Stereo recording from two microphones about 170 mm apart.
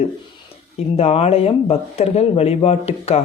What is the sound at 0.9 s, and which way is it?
Speech, 35° left (ahead or behind).